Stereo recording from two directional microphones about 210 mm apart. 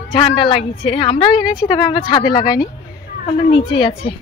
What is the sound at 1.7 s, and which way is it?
Speech, 20° left (ahead or behind).